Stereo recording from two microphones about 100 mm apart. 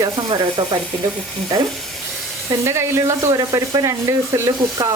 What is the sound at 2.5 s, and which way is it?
Speech, 25° right (ahead or behind).